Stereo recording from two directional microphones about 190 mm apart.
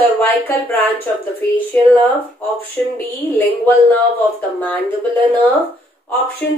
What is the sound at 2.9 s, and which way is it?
A woman's voice, 10° left (ahead or behind).